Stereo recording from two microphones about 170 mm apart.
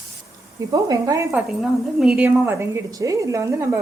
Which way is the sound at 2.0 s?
5° right (ahead or behind).